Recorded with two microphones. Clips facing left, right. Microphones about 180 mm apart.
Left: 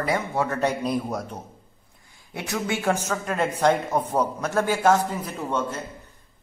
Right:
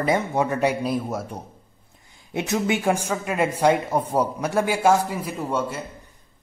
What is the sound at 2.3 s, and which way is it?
Speech, 20° right (ahead or behind).